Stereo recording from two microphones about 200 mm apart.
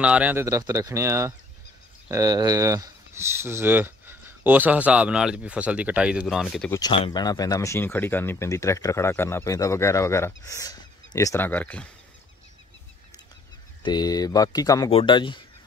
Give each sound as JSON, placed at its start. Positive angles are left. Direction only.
{"t": 0.0, "sound": "speech", "side_deg": -5}
{"t": 6.7, "sound": "speech", "side_deg": 20}
{"t": 13.8, "sound": "speech", "side_deg": 20}